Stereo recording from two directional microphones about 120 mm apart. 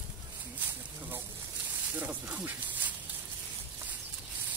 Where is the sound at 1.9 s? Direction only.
15° right (ahead or behind).